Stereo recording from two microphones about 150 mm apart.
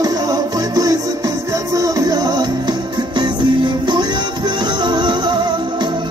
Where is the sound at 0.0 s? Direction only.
25° right (ahead or behind).